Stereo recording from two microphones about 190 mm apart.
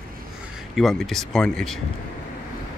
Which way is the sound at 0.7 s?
Centre (ahead or behind).